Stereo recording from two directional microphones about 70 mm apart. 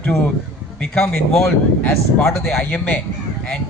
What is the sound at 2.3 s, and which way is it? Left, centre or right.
Speech, centre.